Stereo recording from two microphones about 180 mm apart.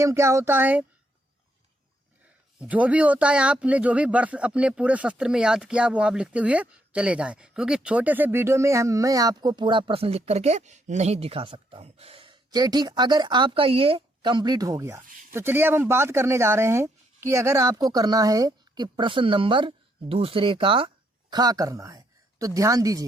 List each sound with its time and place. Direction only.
0.0 s speech: 15° right (ahead or behind)
2.6 s speech: 10° right (ahead or behind)